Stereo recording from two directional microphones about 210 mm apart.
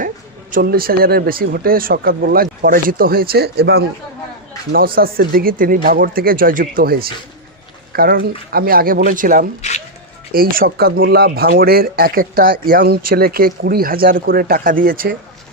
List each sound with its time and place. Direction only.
0.5 s speech: 45° right (ahead or behind)
4.9 s speech: 45° right (ahead or behind)
9.6 s speech: 30° left (ahead or behind)
10.3 s speech: 45° right (ahead or behind)